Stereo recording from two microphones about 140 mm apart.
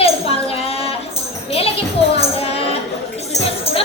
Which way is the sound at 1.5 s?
45° left (ahead or behind).